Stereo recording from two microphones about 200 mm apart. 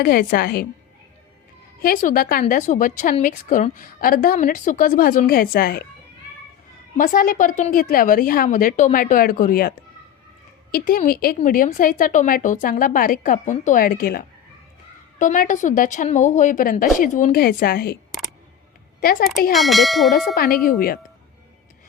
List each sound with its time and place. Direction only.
0.0 s a woman's voice: 45° left (ahead or behind)
1.8 s a woman's voice: 45° left (ahead or behind)
6.9 s a woman's voice: 45° left (ahead or behind)
18.9 s a woman's voice: 45° left (ahead or behind)
19.5 s speech: centre (ahead or behind)
20.1 s a woman's voice: 50° left (ahead or behind)